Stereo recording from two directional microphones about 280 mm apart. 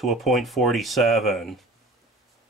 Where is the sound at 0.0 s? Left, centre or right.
Centre.